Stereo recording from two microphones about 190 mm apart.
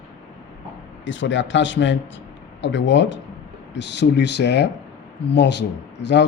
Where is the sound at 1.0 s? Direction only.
75° left (ahead or behind).